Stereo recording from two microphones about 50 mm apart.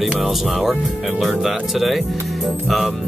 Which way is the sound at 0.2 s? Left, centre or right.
Centre.